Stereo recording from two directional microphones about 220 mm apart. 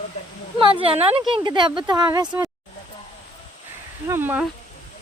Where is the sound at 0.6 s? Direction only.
25° right (ahead or behind).